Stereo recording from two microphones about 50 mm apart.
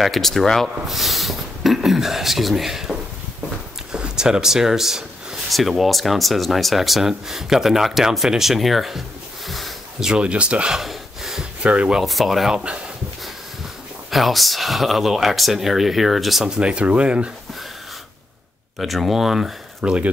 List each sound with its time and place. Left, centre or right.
0.0 s speech: centre
9.5 s a sound: centre
9.9 s speech: centre
10.2 s speech: right
10.8 s gasp: centre
11.6 s speech: right
12.0 s speech: centre
12.5 s speech: right
14.1 s speech: centre
16.4 s speech: centre
18.8 s speech: centre
19.8 s speech: right